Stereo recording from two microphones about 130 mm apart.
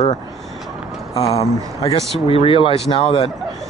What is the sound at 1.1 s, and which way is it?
Speech, 55° left (ahead or behind).